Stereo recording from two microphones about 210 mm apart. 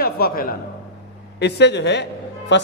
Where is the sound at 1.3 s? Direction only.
55° left (ahead or behind).